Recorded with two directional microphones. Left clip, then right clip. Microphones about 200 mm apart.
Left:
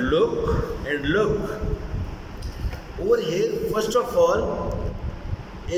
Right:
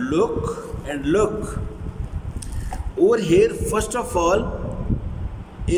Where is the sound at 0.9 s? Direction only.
45° right (ahead or behind).